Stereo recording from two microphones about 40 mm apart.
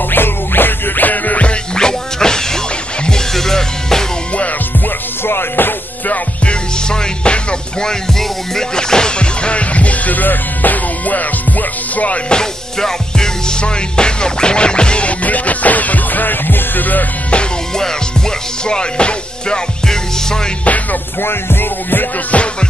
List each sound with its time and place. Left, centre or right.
0.1 s music: left
1.8 s music: centre
5.2 s music: left
6.4 s music: left
7.8 s music: centre; by 11.2 s left
12.3 s music: centre
15.2 s music: left
18.7 s music: left
20.6 s music: left
21.2 s music: left